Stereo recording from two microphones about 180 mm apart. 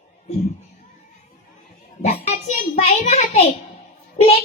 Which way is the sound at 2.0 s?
40° left (ahead or behind).